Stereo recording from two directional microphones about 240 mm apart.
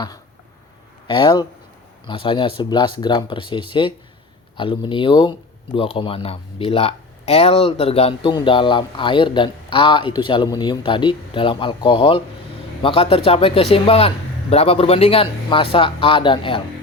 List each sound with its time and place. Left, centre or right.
1.0 s speech: centre